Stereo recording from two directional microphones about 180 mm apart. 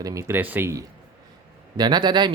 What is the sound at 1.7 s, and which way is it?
Speech, 25° right (ahead or behind).